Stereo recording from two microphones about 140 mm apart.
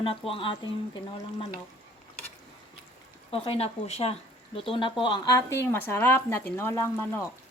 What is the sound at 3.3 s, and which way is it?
Speech, 40° left (ahead or behind).